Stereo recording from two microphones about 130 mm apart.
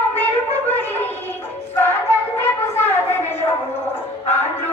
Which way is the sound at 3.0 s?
15° left (ahead or behind).